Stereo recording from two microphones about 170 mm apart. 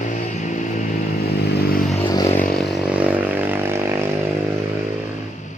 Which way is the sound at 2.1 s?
20° left (ahead or behind).